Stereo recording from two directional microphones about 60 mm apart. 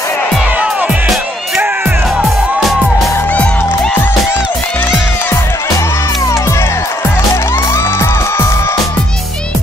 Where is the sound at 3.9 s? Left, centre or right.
Left.